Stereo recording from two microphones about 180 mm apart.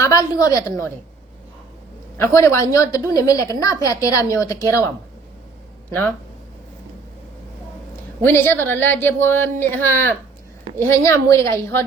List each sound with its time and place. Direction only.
0.0 s a woman's voice: 20° left (ahead or behind)
2.1 s a woman's voice: 15° left (ahead or behind)
5.9 s a woman's voice: 10° left (ahead or behind)
8.2 s a woman's voice: 10° left (ahead or behind)